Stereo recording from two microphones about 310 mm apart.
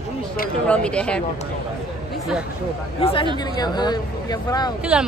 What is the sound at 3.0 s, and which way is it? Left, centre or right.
Speech, centre.